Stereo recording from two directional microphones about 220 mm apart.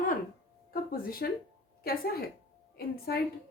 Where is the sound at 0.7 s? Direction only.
40° left (ahead or behind).